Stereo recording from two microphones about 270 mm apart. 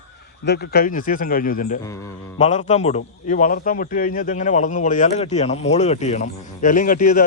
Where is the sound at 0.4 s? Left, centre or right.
Left.